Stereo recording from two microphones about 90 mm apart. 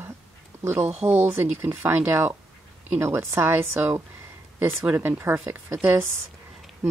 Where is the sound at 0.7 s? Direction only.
25° right (ahead or behind).